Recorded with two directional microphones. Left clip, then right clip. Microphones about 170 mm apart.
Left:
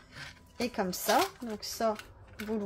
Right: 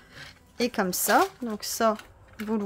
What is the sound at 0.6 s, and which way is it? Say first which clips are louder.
Speech: right 6 dB; 30° right (ahead or behind).